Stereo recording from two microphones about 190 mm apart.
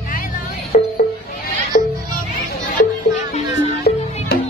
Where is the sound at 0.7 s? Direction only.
50° left (ahead or behind).